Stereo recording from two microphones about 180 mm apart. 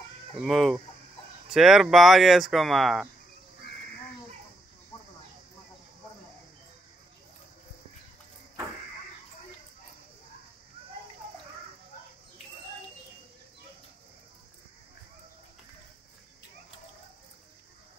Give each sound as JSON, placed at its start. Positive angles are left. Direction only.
{"t": 0.4, "sound": "speech", "side_deg": 0}